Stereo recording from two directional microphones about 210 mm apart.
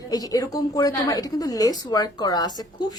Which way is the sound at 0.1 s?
15° left (ahead or behind).